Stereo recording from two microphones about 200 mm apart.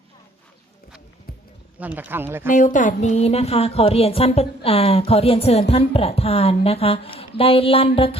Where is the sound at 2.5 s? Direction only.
40° left (ahead or behind).